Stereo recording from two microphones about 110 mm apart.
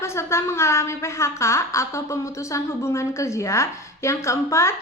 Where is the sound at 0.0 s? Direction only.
25° left (ahead or behind).